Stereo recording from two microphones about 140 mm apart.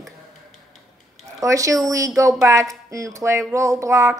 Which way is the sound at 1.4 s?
25° right (ahead or behind).